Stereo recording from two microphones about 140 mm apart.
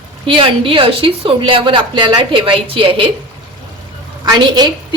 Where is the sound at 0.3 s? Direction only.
40° right (ahead or behind).